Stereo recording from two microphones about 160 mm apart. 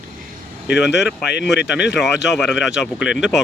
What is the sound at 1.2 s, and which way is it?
Speech, 90° left.